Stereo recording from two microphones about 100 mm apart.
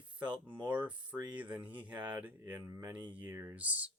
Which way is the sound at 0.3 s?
20° right (ahead or behind).